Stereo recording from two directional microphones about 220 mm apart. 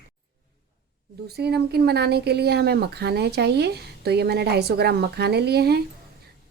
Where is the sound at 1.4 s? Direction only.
50° right (ahead or behind).